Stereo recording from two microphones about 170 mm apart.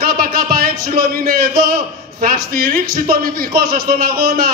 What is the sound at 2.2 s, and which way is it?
A man's voice, 60° right (ahead or behind).